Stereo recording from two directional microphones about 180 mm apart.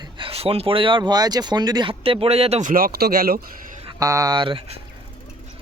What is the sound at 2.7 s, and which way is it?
Speech, 55° right (ahead or behind).